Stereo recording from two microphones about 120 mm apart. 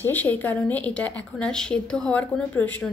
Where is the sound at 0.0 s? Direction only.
15° left (ahead or behind).